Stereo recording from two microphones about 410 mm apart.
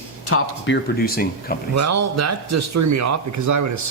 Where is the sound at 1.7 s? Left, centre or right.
Right.